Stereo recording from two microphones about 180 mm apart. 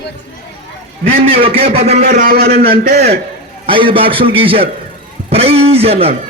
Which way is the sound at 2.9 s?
40° right (ahead or behind).